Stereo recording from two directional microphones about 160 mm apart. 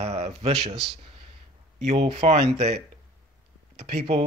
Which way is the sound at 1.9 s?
40° right (ahead or behind).